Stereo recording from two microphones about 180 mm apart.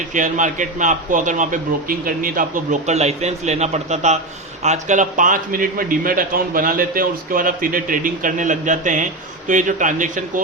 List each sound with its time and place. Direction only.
0.1 s a man's voice: 45° right (ahead or behind)